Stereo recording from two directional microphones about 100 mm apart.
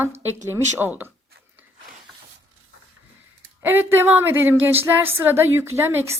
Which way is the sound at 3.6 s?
20° right (ahead or behind).